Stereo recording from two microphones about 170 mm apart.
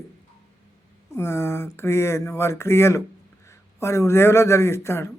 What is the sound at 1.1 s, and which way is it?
A man's voice, 15° left (ahead or behind).